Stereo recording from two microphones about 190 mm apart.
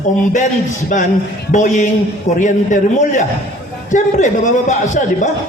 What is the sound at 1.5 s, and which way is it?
A man's voice, 40° left (ahead or behind).